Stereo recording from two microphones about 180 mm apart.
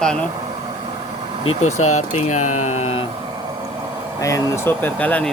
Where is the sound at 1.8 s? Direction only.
40° left (ahead or behind).